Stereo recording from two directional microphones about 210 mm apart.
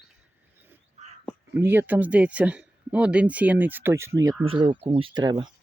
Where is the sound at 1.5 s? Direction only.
10° right (ahead or behind).